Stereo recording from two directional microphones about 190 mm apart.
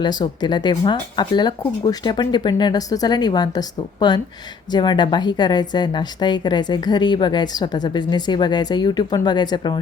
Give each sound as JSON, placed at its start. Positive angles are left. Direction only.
{"t": 0.0, "sound": "a woman's voice", "side_deg": 20}